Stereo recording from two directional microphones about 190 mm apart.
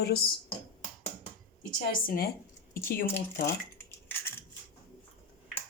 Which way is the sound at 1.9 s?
50° left (ahead or behind).